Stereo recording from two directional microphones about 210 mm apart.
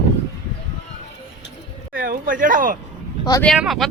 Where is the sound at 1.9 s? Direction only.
45° right (ahead or behind).